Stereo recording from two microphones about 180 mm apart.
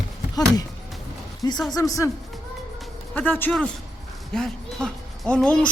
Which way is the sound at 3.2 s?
10° left (ahead or behind).